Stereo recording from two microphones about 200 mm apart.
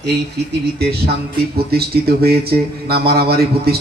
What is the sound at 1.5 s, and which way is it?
A man's voice, 50° right (ahead or behind).